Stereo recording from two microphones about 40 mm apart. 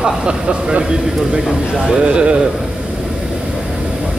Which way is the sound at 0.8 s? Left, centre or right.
Centre.